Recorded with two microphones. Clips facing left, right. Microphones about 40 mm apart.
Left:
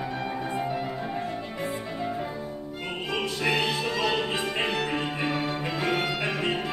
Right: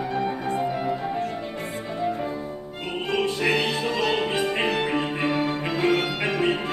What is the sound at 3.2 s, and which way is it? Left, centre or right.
Music, right.